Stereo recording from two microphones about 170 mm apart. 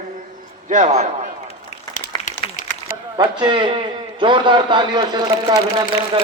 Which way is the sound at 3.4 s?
30° right (ahead or behind).